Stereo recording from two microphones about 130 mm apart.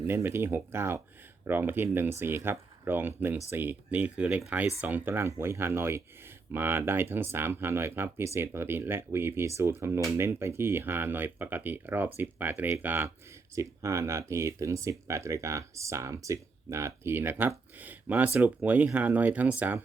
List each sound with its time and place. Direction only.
0.1 s speech: 20° right (ahead or behind)